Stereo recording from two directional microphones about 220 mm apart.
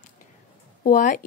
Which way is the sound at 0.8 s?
35° left (ahead or behind).